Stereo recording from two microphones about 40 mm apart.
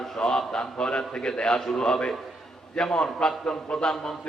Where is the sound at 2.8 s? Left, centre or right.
Centre.